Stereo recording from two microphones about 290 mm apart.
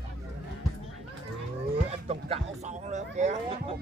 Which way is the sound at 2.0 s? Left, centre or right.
Right.